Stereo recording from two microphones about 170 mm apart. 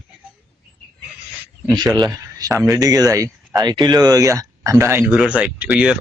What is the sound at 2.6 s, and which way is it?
Speech, 20° right (ahead or behind).